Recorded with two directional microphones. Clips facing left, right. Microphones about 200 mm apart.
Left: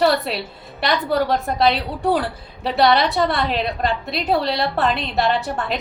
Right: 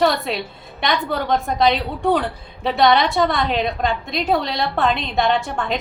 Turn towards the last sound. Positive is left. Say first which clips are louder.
# right 1 dB
turn(degrees=5)  # may be behind; listen again after turning